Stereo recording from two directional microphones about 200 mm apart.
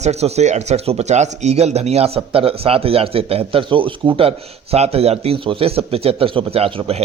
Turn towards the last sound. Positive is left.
turn(degrees=-30)  # may be behind; listen again after turning